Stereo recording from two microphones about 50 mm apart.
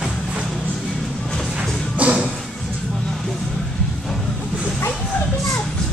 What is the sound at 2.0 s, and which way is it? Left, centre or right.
Music, right.